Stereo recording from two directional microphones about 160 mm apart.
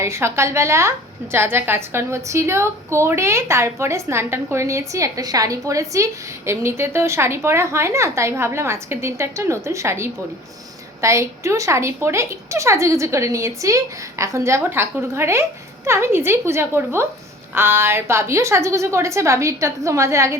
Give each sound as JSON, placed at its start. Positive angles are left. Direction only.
{"t": 0.0, "sound": "a woman's voice", "side_deg": -15}